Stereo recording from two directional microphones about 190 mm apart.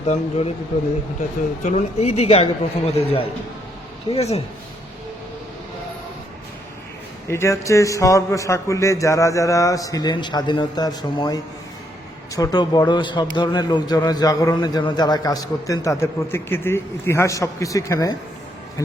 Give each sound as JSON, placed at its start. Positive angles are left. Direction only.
{"t": 0.0, "sound": "a man's voice", "side_deg": 35}
{"t": 1.6, "sound": "a man's voice", "side_deg": 35}
{"t": 7.3, "sound": "a man's voice", "side_deg": 15}
{"t": 12.4, "sound": "a man's voice", "side_deg": 20}